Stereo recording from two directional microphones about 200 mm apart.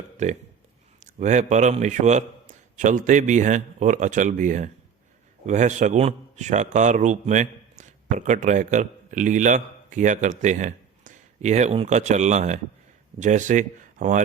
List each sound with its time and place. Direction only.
0.9 s a man's voice: 35° right (ahead or behind)